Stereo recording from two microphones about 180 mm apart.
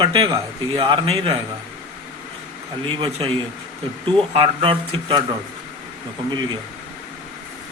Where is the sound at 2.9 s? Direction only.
25° right (ahead or behind).